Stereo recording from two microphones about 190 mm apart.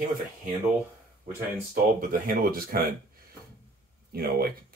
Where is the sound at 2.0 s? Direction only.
50° right (ahead or behind).